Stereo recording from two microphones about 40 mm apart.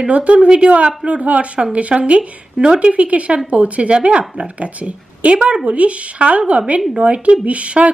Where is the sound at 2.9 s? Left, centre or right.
Right.